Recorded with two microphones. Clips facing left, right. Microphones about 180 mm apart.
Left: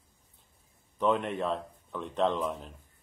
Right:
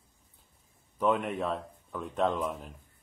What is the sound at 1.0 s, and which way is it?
Speech, 5° right (ahead or behind).